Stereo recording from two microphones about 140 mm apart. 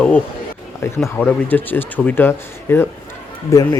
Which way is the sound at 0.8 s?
20° left (ahead or behind).